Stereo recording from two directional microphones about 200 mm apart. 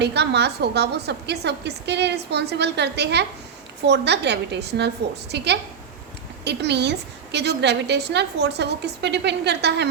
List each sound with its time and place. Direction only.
0.0 s a woman's voice: 55° right (ahead or behind)